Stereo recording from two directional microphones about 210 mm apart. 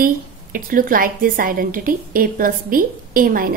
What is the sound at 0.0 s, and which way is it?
A woman's voice, 40° right (ahead or behind).